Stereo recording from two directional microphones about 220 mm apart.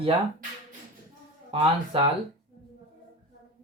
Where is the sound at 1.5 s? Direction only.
25° right (ahead or behind).